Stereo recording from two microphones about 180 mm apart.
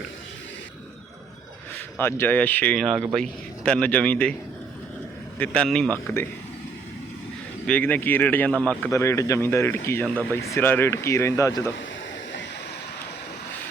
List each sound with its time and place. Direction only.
2.0 s speech: 10° left (ahead or behind)
5.4 s speech: 5° left (ahead or behind)
7.7 s speech: 10° left (ahead or behind)
8.9 s speech: 15° left (ahead or behind)